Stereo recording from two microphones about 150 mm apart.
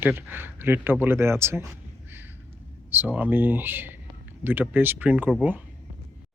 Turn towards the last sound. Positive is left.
turn(degrees=-10)  # may be behind; listen again after turning